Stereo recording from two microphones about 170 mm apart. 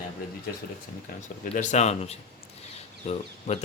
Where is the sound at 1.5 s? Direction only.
45° left (ahead or behind).